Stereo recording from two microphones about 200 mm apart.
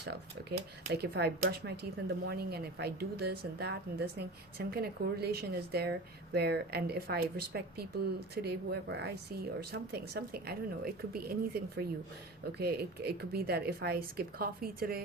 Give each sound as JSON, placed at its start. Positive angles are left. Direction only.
{"t": 0.9, "sound": "speech", "side_deg": -50}